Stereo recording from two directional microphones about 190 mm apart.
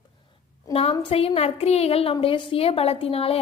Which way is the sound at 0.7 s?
30° left (ahead or behind).